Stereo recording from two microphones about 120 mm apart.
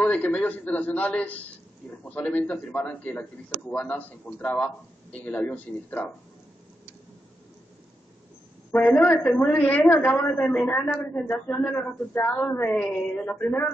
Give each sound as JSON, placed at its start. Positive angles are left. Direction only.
{"t": 0.0, "sound": "speech", "side_deg": 15}
{"t": 8.7, "sound": "speech", "side_deg": 10}